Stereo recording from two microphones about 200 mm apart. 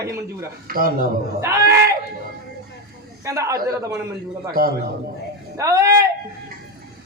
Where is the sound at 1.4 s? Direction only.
15° right (ahead or behind).